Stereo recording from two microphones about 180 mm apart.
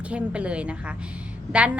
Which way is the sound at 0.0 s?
5° right (ahead or behind).